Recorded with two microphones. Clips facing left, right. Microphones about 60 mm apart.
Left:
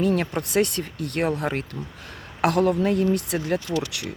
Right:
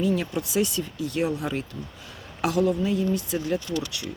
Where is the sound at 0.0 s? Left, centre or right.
Left.